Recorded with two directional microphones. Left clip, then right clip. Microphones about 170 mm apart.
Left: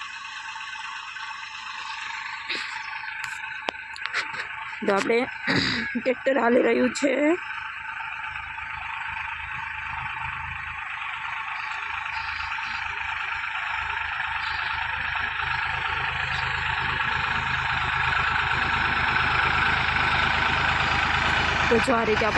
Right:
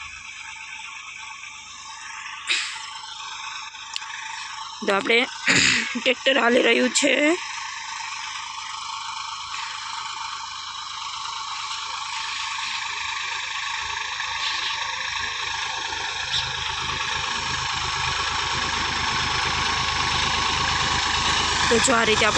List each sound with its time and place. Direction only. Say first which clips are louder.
4.9 s speech: right 3 dB; centre (ahead or behind)
12.6 s vehicle: right 1 dB; 10° right (ahead or behind)